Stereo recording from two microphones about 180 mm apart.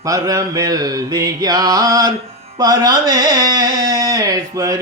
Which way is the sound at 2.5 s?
20° right (ahead or behind).